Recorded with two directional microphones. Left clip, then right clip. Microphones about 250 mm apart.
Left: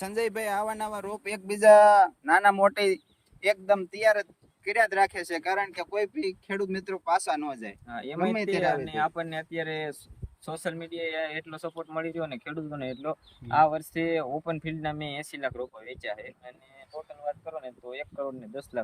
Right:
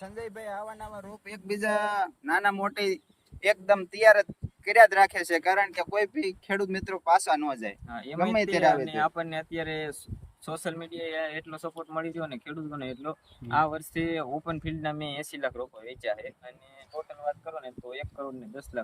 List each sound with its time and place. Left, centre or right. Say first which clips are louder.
0.9 s speech: left 8 dB; left; by 3.0 s centre
3.4 s speech: right 1 dB; centre
7.9 s speech: left 2 dB; centre
8.2 s speech: right 4 dB; centre
8.9 s speech: right 1 dB; centre